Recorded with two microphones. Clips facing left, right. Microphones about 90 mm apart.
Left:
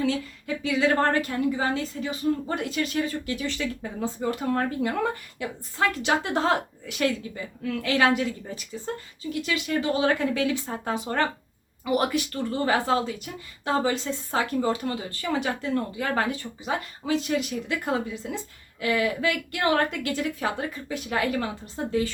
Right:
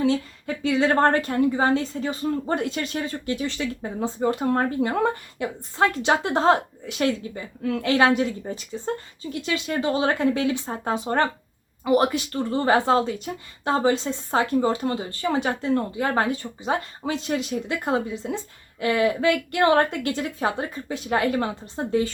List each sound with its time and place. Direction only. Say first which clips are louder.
0.0 s a woman's voice: right 4 dB; 30° right (ahead or behind)